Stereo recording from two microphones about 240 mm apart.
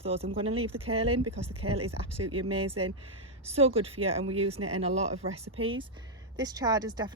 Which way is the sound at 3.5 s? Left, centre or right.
Right.